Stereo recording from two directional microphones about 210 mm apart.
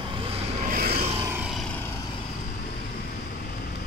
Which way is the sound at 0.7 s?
45° right (ahead or behind).